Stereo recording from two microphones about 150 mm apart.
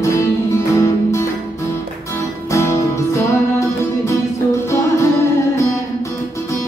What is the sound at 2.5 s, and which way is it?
Music, 20° left (ahead or behind).